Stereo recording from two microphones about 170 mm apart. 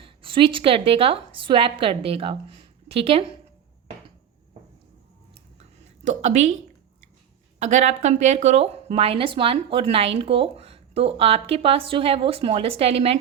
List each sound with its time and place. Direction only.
0.0 s a woman's voice: 30° right (ahead or behind)
6.1 s speech: 40° right (ahead or behind)
7.6 s speech: 45° right (ahead or behind)